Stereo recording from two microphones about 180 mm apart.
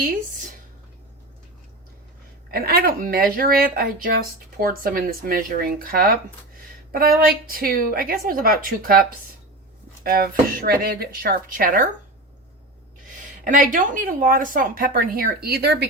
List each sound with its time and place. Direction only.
2.5 s a woman's voice: 60° right (ahead or behind)
13.4 s a woman's voice: 50° right (ahead or behind)